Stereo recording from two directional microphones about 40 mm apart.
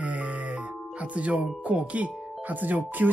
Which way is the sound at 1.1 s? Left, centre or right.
Right.